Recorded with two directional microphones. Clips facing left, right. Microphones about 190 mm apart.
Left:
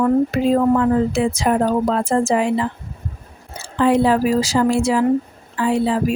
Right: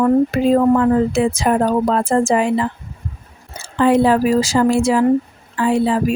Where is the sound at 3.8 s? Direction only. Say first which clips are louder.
Right 2 dB; 55° right (ahead or behind).